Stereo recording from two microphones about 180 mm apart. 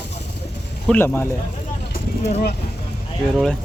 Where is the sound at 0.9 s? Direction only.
10° left (ahead or behind).